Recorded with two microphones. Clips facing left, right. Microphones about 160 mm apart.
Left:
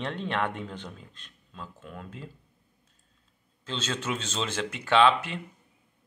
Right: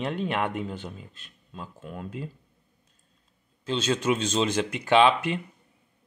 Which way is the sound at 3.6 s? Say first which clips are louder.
Right 7 dB; 15° right (ahead or behind).